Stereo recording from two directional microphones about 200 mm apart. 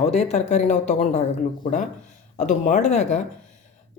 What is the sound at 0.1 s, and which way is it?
Speech, 35° left (ahead or behind).